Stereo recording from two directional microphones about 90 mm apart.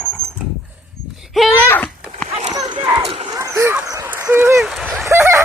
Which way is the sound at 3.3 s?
35° right (ahead or behind).